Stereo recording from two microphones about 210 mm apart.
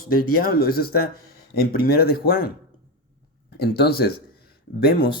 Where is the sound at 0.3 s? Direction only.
45° left (ahead or behind).